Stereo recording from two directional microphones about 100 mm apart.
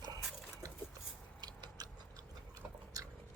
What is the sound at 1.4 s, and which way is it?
Tick-tock, 40° right (ahead or behind).